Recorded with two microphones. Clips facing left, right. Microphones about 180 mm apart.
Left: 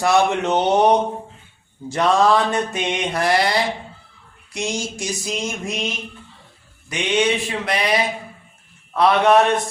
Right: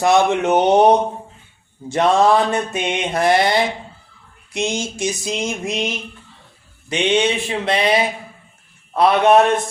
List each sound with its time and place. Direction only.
0.0 s mantra: 20° right (ahead or behind)
1.9 s mantra: 25° right (ahead or behind)
6.9 s mantra: 25° right (ahead or behind)